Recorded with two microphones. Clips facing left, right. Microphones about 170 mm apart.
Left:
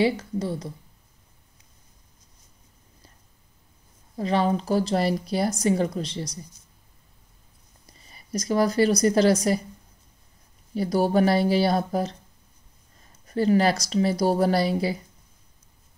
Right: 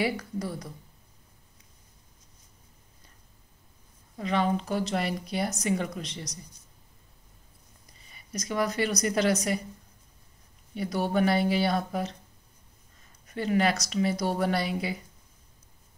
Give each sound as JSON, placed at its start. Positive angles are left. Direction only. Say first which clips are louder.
{"t": 0.0, "sound": "speech", "louder": "left 6 dB", "side_deg": 25}
{"t": 4.2, "sound": "speech", "louder": "left 4 dB", "side_deg": 35}
{"t": 8.1, "sound": "speech", "louder": "left 8 dB", "side_deg": 35}
{"t": 10.7, "sound": "speech", "louder": "left 6 dB", "side_deg": 35}
{"t": 13.3, "sound": "speech", "louder": "left 5 dB", "side_deg": 35}